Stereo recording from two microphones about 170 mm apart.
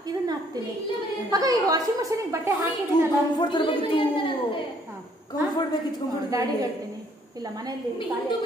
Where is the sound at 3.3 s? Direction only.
25° left (ahead or behind).